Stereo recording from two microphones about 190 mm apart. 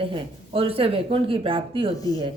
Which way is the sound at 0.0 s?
30° right (ahead or behind).